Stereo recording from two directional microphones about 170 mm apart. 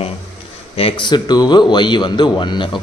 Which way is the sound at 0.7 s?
30° left (ahead or behind).